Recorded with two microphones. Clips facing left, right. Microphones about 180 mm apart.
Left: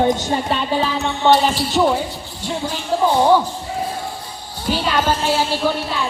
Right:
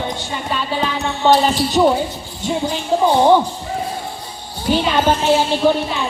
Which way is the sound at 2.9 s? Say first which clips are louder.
Right 2 dB; 20° right (ahead or behind).